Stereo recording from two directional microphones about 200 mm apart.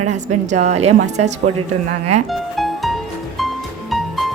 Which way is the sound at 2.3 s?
Centre (ahead or behind).